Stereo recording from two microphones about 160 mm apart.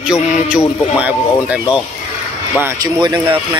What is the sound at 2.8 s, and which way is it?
Speech, 25° right (ahead or behind).